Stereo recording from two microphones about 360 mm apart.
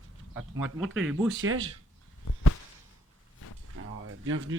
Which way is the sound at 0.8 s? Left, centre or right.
Centre.